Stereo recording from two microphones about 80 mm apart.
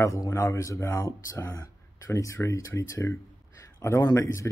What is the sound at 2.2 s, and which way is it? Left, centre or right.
Speech, left.